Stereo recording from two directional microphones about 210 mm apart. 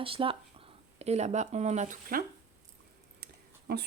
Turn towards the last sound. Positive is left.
turn(degrees=-50)  # may be behind; listen again after turning